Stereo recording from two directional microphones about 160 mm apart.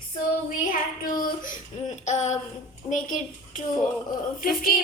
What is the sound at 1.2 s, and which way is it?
Child singing, 50° left (ahead or behind).